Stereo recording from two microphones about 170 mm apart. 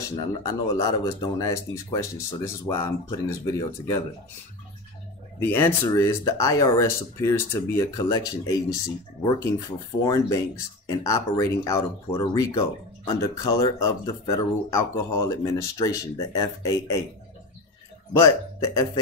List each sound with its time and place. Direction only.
0.0 s speech: 20° left (ahead or behind)
5.4 s speech: 15° left (ahead or behind)
18.1 s speech: 15° left (ahead or behind)